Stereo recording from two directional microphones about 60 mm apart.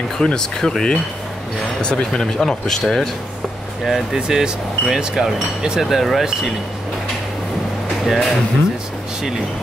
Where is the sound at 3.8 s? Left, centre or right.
Centre.